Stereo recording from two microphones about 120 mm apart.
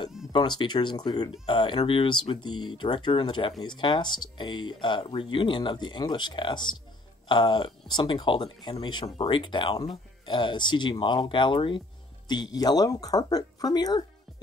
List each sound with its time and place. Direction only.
0.3 s speech: 40° left (ahead or behind)